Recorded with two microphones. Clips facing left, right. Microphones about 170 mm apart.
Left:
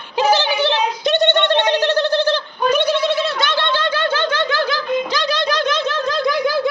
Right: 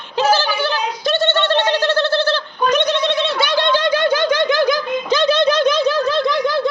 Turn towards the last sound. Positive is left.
turn(degrees=5)  # may be behind; listen again after turning